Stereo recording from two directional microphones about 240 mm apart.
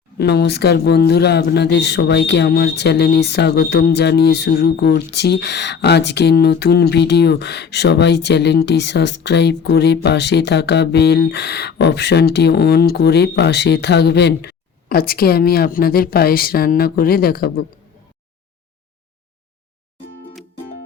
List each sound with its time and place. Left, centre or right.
0.2 s speech: left